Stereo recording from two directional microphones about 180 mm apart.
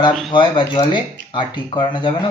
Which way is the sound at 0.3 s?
30° left (ahead or behind).